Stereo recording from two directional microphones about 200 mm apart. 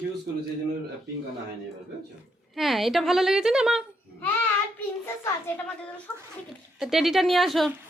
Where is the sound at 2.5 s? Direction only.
Centre (ahead or behind).